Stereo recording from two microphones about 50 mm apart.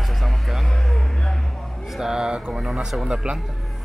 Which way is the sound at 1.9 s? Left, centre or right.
Centre.